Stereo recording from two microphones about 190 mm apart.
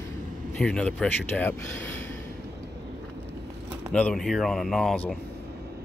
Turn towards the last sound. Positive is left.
turn(degrees=5)  # may be behind; listen again after turning